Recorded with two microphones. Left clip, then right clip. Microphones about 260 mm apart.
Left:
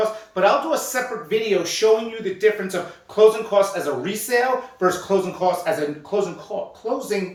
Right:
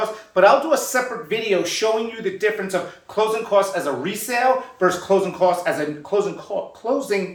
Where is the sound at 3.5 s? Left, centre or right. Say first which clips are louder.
Right 1 dB; centre.